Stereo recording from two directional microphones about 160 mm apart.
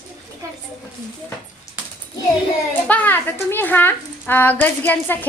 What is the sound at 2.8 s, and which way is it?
A woman's voice, 10° left (ahead or behind).